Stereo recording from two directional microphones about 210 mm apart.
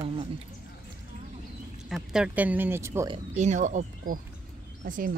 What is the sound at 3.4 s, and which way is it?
Speech, 35° right (ahead or behind).